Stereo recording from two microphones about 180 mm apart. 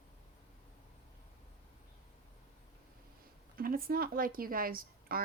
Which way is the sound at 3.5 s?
55° right (ahead or behind).